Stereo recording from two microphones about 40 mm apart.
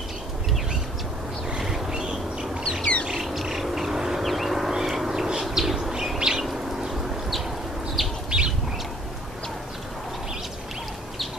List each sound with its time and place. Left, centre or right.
1.6 s a sound: centre
1.9 s bird: centre
2.8 s bird: left
3.1 s bird: centre
4.2 s a sound: centre
5.5 s bird: centre
8.3 s bird: right